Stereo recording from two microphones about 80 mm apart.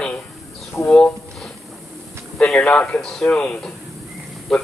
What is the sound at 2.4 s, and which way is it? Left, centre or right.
A man's voice, centre.